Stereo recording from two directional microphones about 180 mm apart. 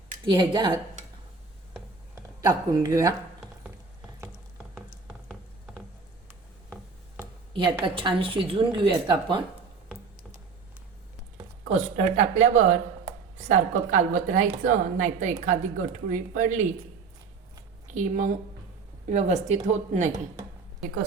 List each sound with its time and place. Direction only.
0.3 s a woman's voice: 25° right (ahead or behind)
2.4 s a woman's voice: 20° right (ahead or behind)
7.5 s a woman's voice: 30° right (ahead or behind)
11.7 s speech: 40° right (ahead or behind)
13.5 s a woman's voice: 45° right (ahead or behind)
17.9 s a woman's voice: 45° right (ahead or behind)